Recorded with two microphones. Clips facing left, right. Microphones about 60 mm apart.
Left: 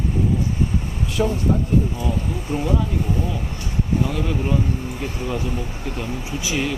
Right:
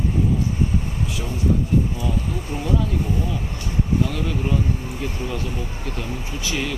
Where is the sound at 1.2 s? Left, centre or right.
Left.